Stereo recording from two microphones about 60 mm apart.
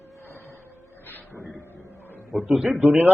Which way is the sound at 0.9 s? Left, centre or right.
Left.